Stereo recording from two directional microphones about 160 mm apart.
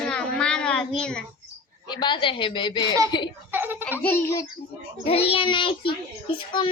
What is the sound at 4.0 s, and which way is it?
Speech, 10° left (ahead or behind).